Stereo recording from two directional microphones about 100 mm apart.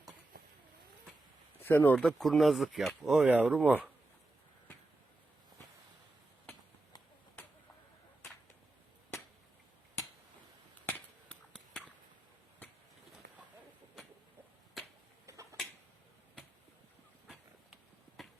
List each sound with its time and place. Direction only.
1.6 s speech: 20° left (ahead or behind)
2.0 s speech: 5° left (ahead or behind); by 3.8 s 15° right (ahead or behind)
15.3 s tick-tock: 30° right (ahead or behind)
18.2 s a sound: centre (ahead or behind)